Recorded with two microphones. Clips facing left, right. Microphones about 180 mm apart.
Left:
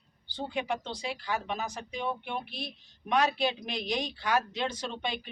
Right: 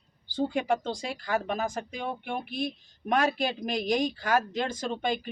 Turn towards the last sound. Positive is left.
turn(degrees=-45)  # may be behind; listen again after turning